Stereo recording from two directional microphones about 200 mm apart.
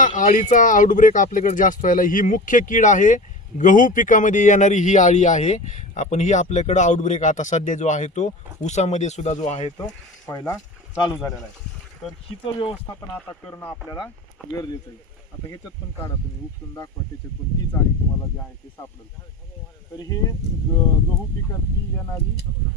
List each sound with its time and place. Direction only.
0.0 s speech: 40° left (ahead or behind)
9.7 s speech: 20° left (ahead or behind)
13.5 s speech: 20° left (ahead or behind)
15.4 s speech: 15° left (ahead or behind)
20.0 s speech: 15° left (ahead or behind)